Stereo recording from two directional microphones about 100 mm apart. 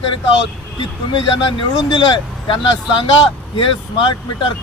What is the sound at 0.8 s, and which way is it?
Speech, 60° left (ahead or behind).